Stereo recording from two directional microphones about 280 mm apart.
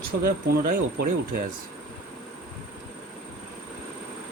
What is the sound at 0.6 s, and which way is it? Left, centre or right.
Speech, right.